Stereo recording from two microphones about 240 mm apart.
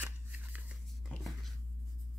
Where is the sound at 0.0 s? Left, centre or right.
Centre.